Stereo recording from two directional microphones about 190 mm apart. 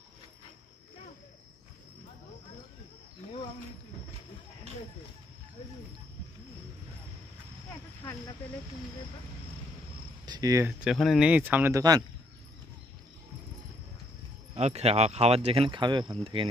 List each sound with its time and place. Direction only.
8.0 s cricket: 10° left (ahead or behind)
10.2 s speech: 20° right (ahead or behind)
10.8 s speech: centre (ahead or behind); by 12.0 s 20° right (ahead or behind)
14.5 s speech: 35° right (ahead or behind)